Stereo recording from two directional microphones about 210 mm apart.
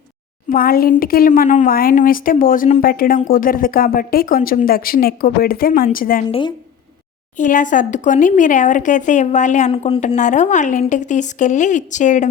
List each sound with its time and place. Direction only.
0.5 s a woman's voice: 45° left (ahead or behind)
7.3 s speech: 40° left (ahead or behind)